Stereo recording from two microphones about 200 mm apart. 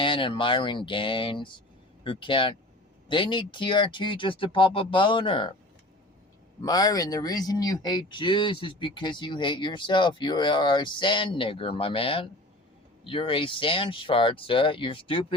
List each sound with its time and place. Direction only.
0.0 s speech: 25° left (ahead or behind)
6.6 s speech: 20° left (ahead or behind)